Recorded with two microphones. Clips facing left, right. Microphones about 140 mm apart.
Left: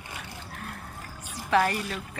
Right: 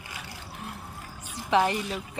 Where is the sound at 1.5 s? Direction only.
20° right (ahead or behind).